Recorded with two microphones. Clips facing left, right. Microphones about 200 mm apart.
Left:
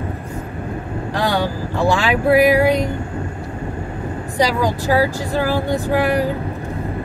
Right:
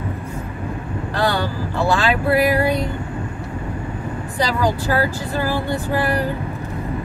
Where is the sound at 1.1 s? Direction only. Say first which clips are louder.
Left 1 dB; 15° left (ahead or behind).